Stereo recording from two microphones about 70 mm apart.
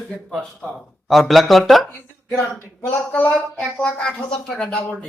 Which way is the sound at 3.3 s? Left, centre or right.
Centre.